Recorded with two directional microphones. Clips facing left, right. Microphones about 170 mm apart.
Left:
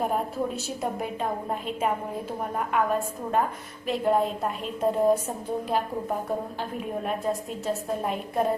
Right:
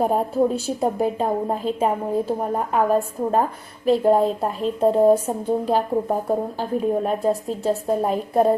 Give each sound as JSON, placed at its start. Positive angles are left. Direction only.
{"t": 0.0, "sound": "a woman's voice", "side_deg": -35}